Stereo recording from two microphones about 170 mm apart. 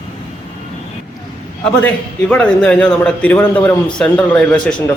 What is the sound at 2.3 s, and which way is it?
Speech, 10° left (ahead or behind).